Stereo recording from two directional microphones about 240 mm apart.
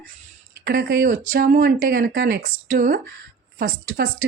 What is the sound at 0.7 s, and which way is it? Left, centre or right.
A woman's voice, right.